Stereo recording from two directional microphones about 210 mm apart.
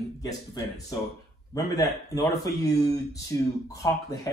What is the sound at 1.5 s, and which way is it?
Speech, 15° left (ahead or behind).